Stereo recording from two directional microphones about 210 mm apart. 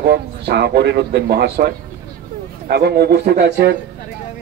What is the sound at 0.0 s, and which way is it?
Speech, 55° right (ahead or behind).